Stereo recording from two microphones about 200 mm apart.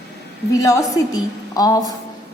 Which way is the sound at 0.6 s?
15° left (ahead or behind).